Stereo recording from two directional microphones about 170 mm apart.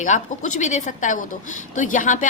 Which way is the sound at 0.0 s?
45° left (ahead or behind).